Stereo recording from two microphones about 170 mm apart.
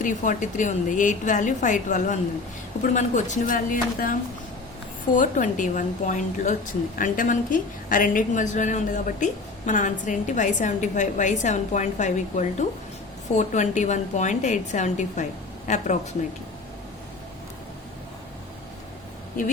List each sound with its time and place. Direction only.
0.0 s a woman's voice: 50° left (ahead or behind)